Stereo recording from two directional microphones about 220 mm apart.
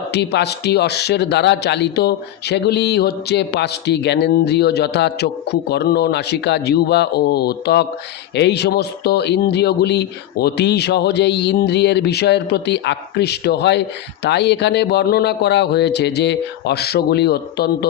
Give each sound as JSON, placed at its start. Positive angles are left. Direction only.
{"t": 0.1, "sound": "speech", "side_deg": 50}